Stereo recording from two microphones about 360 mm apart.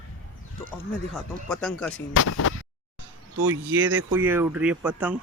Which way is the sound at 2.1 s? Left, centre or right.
Left.